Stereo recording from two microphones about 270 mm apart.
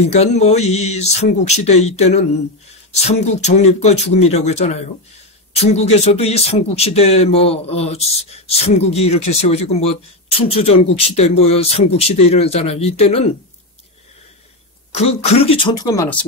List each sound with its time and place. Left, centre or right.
0.1 s speech: left
15.0 s speech: left